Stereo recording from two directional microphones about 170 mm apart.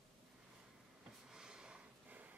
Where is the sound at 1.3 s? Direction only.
5° right (ahead or behind).